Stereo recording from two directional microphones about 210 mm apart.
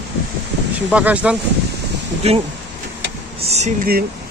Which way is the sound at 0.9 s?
5° right (ahead or behind).